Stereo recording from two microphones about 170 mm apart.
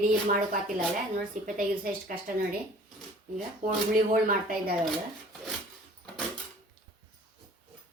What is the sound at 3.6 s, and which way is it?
Speech, 50° right (ahead or behind).